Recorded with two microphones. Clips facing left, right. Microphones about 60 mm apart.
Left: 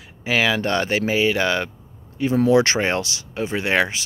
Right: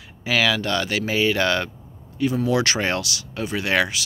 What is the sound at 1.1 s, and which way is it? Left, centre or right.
Speech, centre.